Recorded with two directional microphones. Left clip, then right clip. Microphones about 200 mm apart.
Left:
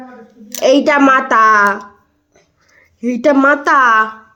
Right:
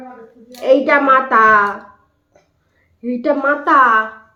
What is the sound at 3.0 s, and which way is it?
Speech, 55° left (ahead or behind).